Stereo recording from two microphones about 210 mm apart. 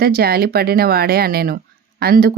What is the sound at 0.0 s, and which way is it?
Speech, 45° right (ahead or behind).